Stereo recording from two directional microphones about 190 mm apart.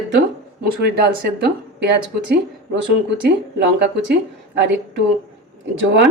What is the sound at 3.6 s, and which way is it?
Speech, 60° right (ahead or behind).